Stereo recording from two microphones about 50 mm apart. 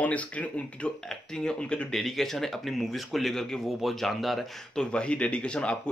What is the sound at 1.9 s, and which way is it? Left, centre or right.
Speech, centre.